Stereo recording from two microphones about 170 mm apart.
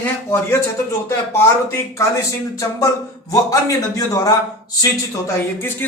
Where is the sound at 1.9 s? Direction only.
20° left (ahead or behind).